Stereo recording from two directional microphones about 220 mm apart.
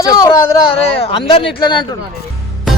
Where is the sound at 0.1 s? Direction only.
15° left (ahead or behind).